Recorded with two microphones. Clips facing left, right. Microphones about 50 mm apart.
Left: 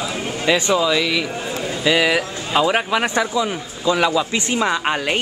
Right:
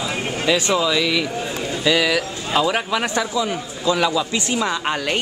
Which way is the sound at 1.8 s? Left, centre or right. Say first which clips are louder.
Left 1 dB; centre.